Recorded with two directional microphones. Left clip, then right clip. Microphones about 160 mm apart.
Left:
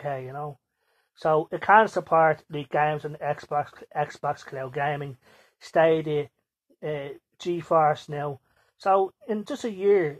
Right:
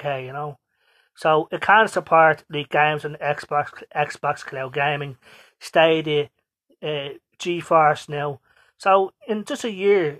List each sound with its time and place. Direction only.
0.0 s speech: 25° right (ahead or behind)